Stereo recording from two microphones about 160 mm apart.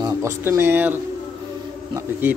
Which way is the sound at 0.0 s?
15° right (ahead or behind).